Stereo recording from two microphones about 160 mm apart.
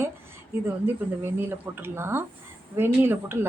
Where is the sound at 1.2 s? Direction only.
15° right (ahead or behind).